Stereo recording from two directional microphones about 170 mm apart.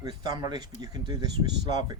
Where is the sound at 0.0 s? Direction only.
25° right (ahead or behind).